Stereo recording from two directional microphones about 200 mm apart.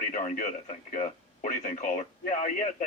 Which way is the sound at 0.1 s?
40° left (ahead or behind).